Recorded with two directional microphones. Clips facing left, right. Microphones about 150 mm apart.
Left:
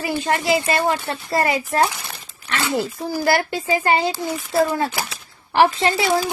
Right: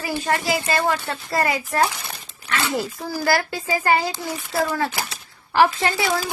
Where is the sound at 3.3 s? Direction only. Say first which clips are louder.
Left 2 dB; 25° left (ahead or behind).